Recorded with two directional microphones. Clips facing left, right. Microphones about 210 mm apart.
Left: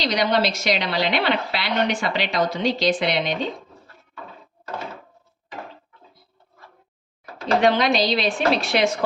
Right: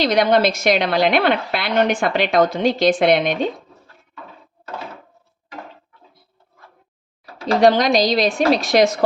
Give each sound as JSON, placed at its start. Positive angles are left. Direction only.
{"t": 0.0, "sound": "a woman's voice", "side_deg": -55}
{"t": 7.6, "sound": "a woman's voice", "side_deg": -40}